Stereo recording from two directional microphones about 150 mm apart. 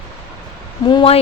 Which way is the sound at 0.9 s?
30° left (ahead or behind).